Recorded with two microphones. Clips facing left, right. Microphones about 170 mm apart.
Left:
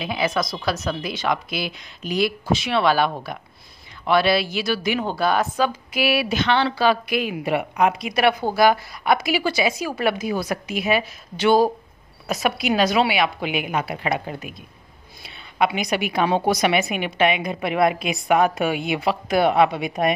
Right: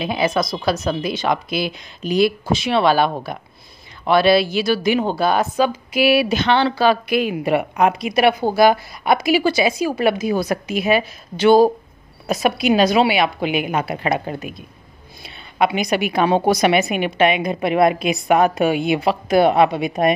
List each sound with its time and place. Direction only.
0.0 s a woman's voice: 30° right (ahead or behind); by 7.9 s 45° right (ahead or behind)
8.0 s a woman's voice: 20° right (ahead or behind)
9.8 s a woman's voice: 20° right (ahead or behind)
10.3 s a woman's voice: 35° right (ahead or behind)
15.6 s a woman's voice: 40° right (ahead or behind)